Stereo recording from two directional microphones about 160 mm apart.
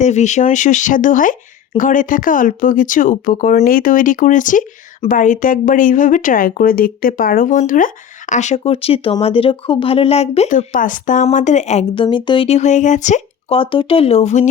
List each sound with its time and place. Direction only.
0.0 s speech: 45° left (ahead or behind)
12.0 s speech: 30° left (ahead or behind)
12.5 s speech: 45° left (ahead or behind)
13.6 s speech: 35° left (ahead or behind)